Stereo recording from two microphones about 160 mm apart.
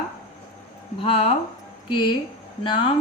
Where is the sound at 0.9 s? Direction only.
35° left (ahead or behind).